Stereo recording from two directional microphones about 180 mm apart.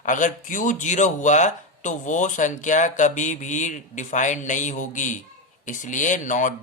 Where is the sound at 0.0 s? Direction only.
45° left (ahead or behind).